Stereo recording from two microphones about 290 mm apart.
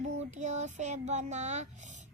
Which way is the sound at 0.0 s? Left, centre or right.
Right.